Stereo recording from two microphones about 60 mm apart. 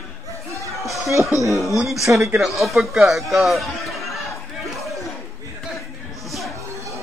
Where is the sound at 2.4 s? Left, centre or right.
Centre.